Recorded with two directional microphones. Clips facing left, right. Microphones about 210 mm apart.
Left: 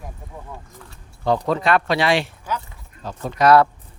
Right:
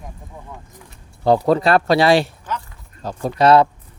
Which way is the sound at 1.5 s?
35° right (ahead or behind).